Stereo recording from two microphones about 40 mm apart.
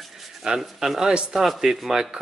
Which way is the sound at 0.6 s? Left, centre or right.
Centre.